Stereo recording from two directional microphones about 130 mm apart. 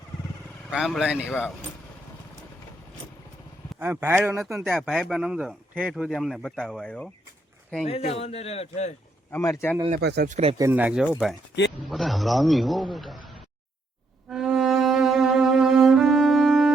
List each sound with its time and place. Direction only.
0.7 s speech: 5° right (ahead or behind)
3.8 s a man's voice: 15° right (ahead or behind)
4.4 s speech: centre (ahead or behind)
7.9 s a man's voice: 50° left (ahead or behind)
9.3 s speech: 20° left (ahead or behind)
9.9 s speech: 70° right (ahead or behind)
10.6 s a man's voice: 15° right (ahead or behind); by 13.3 s centre (ahead or behind)
14.3 s cello: 5° right (ahead or behind)